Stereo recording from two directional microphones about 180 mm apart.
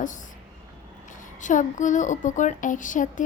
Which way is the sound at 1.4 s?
45° left (ahead or behind).